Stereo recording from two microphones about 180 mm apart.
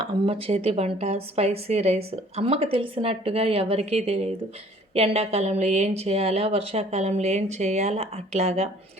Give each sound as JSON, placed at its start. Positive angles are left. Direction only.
{"t": 0.3, "sound": "a woman's voice", "side_deg": -35}